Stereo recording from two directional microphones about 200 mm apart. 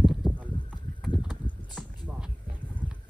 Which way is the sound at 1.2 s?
5° right (ahead or behind).